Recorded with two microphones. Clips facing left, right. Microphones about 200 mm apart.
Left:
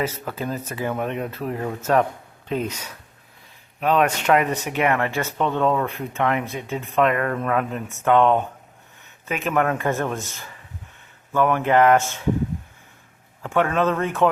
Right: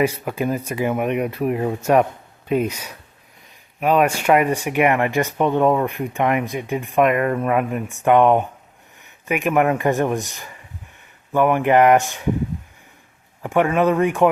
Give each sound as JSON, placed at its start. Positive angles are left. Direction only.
{"t": 0.0, "sound": "speech", "side_deg": -15}
{"t": 13.4, "sound": "speech", "side_deg": -15}